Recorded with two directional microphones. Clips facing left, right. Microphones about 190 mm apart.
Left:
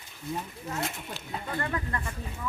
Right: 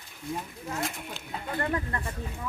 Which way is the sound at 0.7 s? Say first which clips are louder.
Even; centre (ahead or behind).